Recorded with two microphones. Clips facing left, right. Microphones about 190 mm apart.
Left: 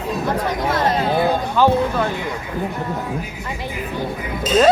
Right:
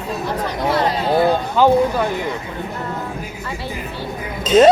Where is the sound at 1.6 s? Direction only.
15° right (ahead or behind).